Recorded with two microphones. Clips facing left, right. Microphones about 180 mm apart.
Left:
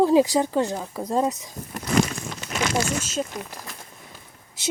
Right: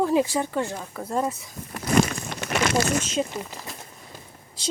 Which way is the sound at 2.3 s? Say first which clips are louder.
Right 3 dB; 70° right (ahead or behind).